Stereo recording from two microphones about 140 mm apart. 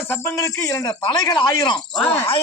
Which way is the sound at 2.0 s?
45° left (ahead or behind).